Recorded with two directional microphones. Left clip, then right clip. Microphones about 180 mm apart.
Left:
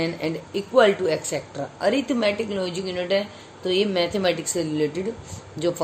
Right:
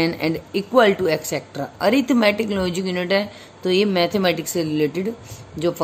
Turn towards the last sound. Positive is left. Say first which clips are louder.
# right 2 dB
turn(degrees=-20)  # may be behind; listen again after turning